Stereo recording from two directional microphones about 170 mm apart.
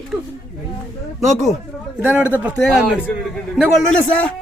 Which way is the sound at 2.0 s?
10° right (ahead or behind).